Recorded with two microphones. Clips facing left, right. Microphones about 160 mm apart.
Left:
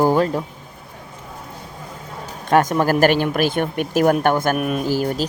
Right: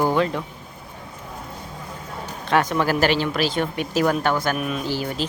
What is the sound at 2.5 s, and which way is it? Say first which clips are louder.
Speech: left 4 dB; 45° left (ahead or behind).